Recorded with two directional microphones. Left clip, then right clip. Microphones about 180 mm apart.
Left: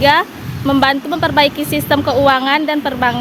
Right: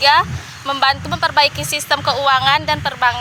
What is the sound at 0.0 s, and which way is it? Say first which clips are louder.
A woman's voice: left 1 dB; 20° right (ahead or behind).